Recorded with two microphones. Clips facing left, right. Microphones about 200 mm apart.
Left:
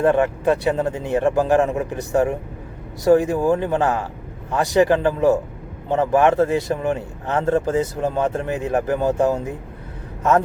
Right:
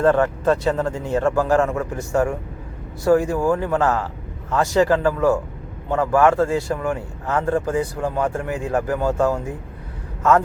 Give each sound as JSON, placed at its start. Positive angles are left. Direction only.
{"t": 0.0, "sound": "speech", "side_deg": 15}